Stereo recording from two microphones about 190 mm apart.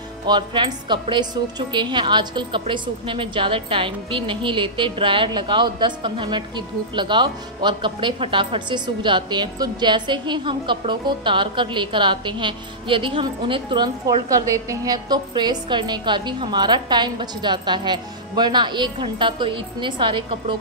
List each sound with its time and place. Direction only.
0.3 s a woman's voice: 25° right (ahead or behind)